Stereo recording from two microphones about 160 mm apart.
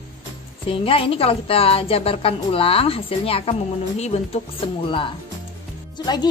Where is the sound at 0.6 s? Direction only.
35° left (ahead or behind).